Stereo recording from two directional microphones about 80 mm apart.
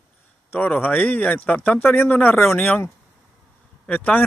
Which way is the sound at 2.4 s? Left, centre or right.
Centre.